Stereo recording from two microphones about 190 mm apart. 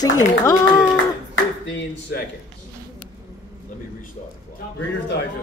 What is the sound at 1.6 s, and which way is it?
Speech, 70° left (ahead or behind).